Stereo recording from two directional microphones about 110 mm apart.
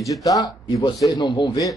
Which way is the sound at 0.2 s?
35° left (ahead or behind).